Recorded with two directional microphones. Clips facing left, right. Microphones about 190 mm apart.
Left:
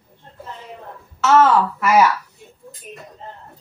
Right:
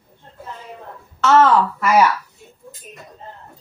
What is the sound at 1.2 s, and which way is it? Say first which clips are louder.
Speech: even; 10° left (ahead or behind).